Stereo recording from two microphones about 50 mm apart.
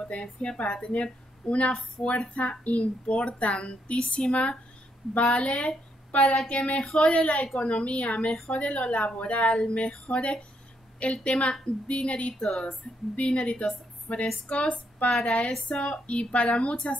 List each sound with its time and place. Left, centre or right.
0.1 s a child's voice: left
2.0 s a woman's voice: centre
2.3 s a child's voice: left
12.4 s a woman's voice: centre